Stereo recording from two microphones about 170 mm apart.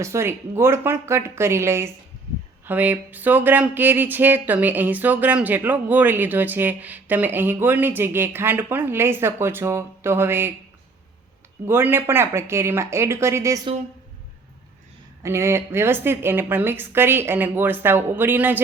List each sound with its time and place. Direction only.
0.0 s speech: 15° right (ahead or behind)
11.6 s speech: 15° right (ahead or behind)
15.2 s speech: 15° right (ahead or behind)